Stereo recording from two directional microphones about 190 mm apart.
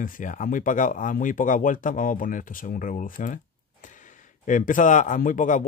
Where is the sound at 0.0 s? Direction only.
45° left (ahead or behind).